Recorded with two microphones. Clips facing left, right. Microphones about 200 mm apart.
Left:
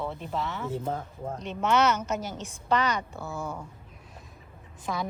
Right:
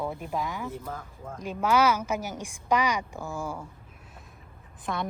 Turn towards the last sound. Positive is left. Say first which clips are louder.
# even
turn(degrees=0)  # may be behind; listen again after turning